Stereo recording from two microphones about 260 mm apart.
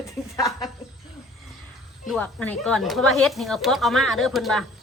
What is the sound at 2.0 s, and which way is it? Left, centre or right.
Speech, centre.